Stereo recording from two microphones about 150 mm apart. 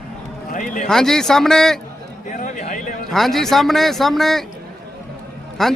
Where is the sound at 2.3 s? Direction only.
55° left (ahead or behind).